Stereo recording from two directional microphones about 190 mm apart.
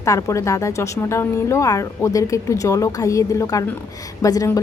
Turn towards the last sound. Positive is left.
turn(degrees=20)  # may be behind; listen again after turning